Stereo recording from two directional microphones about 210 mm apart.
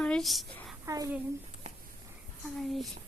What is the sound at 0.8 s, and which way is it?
Speech, 15° right (ahead or behind).